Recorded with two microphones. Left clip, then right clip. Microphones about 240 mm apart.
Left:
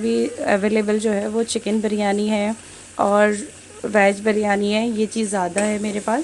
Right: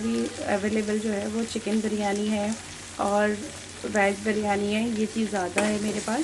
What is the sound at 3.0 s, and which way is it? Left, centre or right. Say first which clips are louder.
Speech: left 8 dB; left.